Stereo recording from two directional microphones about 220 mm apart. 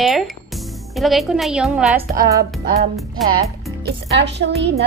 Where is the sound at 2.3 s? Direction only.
45° right (ahead or behind).